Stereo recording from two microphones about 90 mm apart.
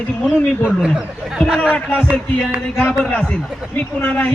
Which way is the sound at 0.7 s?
5° right (ahead or behind).